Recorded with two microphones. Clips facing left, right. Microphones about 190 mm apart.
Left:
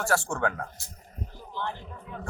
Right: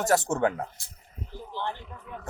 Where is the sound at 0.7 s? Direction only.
45° left (ahead or behind).